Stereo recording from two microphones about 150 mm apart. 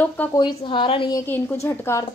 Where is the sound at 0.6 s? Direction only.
35° left (ahead or behind).